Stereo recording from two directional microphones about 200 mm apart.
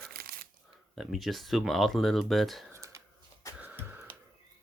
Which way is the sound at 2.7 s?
15° right (ahead or behind).